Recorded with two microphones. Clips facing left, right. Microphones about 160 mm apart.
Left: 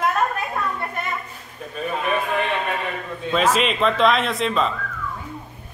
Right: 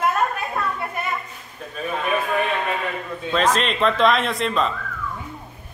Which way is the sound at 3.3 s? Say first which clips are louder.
Left 1 dB; 5° left (ahead or behind).